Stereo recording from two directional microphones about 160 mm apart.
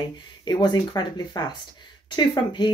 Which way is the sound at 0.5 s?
25° left (ahead or behind).